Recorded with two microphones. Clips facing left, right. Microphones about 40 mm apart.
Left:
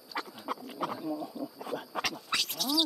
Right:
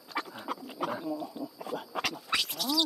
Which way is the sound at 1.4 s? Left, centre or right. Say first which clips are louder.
Even; right.